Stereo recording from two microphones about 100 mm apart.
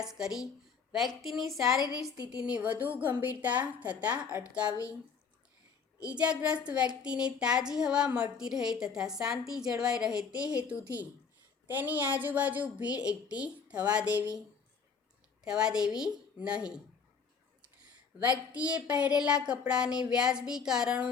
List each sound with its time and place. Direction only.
0.0 s a woman's voice: 5° right (ahead or behind)
1.8 s a woman's voice: 40° left (ahead or behind)
2.4 s speech: 10° right (ahead or behind)
6.4 s speech: 10° right (ahead or behind)
15.4 s speech: 5° right (ahead or behind)
18.5 s speech: 15° right (ahead or behind)